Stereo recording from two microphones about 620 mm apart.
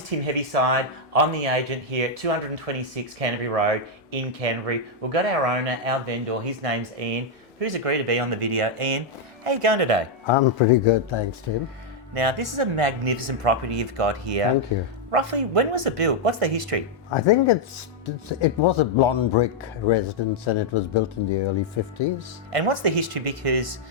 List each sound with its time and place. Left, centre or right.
0.1 s speech: right
10.2 s speech: left
12.1 s speech: right
17.1 s speech: left
22.5 s speech: right